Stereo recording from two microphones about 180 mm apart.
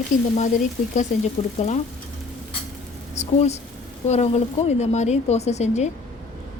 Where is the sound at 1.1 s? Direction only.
45° left (ahead or behind).